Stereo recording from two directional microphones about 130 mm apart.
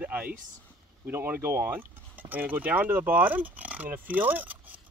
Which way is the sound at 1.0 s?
15° right (ahead or behind).